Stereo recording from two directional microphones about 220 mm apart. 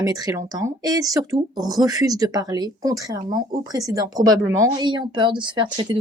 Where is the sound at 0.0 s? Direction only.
15° right (ahead or behind).